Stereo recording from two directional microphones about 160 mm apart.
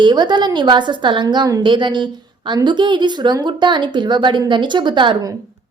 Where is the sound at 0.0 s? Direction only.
25° right (ahead or behind).